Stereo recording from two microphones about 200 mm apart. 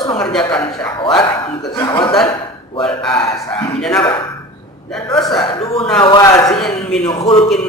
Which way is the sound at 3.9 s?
15° left (ahead or behind).